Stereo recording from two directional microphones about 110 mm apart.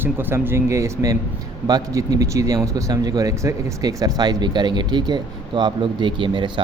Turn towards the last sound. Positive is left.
turn(degrees=-50)  # may be behind; listen again after turning